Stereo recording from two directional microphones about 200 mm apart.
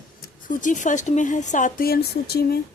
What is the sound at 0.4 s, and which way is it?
A woman's voice, 40° left (ahead or behind).